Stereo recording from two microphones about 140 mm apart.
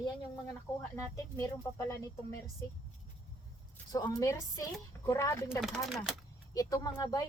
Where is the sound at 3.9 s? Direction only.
30° left (ahead or behind).